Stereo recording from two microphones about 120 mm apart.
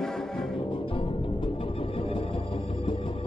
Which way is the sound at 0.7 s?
45° left (ahead or behind).